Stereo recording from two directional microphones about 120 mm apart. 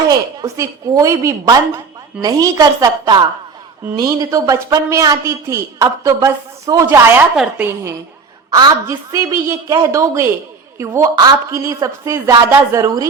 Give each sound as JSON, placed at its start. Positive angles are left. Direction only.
{"t": 0.1, "sound": "a woman's voice", "side_deg": -25}